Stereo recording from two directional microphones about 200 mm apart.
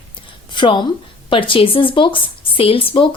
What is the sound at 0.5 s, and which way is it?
A woman's voice, 25° left (ahead or behind).